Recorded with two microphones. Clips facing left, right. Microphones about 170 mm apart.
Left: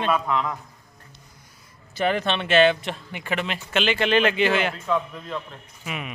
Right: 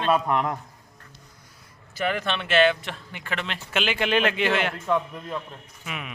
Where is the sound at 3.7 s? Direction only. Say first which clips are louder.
Left 3 dB; 5° right (ahead or behind).